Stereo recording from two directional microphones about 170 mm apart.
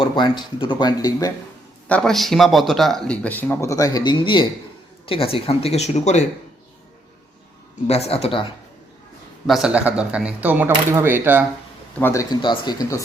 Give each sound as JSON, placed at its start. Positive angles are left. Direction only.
{"t": 0.0, "sound": "speech", "side_deg": 25}
{"t": 1.9, "sound": "speech", "side_deg": 5}
{"t": 7.9, "sound": "speech", "side_deg": 35}
{"t": 9.5, "sound": "speech", "side_deg": -5}
{"t": 11.9, "sound": "speech", "side_deg": 15}